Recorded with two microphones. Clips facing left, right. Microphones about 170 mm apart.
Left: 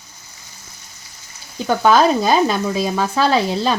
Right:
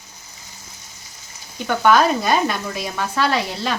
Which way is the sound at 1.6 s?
30° left (ahead or behind).